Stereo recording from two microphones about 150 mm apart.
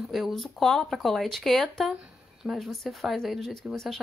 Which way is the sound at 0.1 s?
Centre (ahead or behind).